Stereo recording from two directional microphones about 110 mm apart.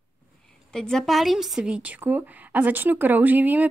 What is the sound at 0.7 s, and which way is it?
Speech, 5° left (ahead or behind).